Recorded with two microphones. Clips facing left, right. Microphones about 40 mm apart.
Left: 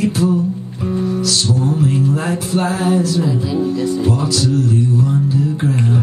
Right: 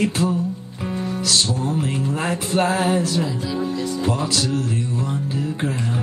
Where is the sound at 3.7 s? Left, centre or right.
Left.